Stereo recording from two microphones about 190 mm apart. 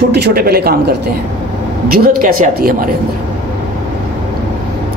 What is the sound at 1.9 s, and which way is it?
Speech, 50° right (ahead or behind).